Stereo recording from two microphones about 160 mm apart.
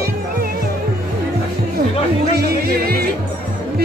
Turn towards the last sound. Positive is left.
turn(degrees=-70)  # may be behind; listen again after turning